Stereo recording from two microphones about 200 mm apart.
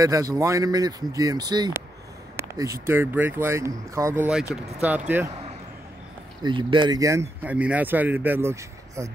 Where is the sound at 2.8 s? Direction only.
10° right (ahead or behind).